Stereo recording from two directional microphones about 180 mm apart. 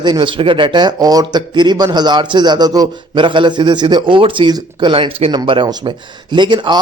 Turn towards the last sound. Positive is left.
turn(degrees=-25)  # may be behind; listen again after turning